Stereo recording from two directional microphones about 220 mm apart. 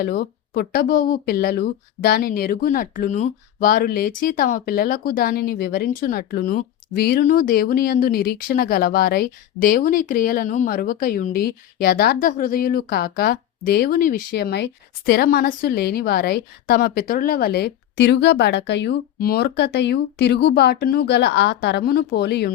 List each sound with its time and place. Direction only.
0.0 s speech: 45° left (ahead or behind)